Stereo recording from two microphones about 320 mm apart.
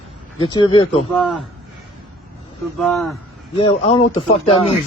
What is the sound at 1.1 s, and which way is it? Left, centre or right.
Speech, centre.